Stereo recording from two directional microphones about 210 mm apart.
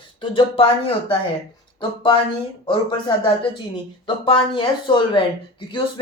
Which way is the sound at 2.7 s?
20° left (ahead or behind).